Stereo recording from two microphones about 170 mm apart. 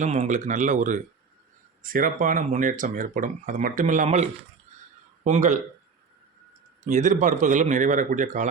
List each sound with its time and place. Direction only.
0.0 s speech: 45° right (ahead or behind)
6.8 s speech: 45° right (ahead or behind)